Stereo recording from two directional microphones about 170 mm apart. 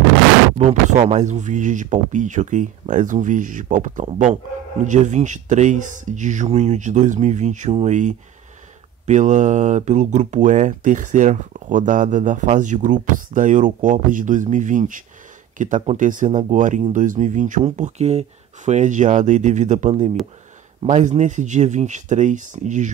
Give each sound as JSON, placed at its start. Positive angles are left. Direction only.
{"t": 0.6, "sound": "speech", "side_deg": -40}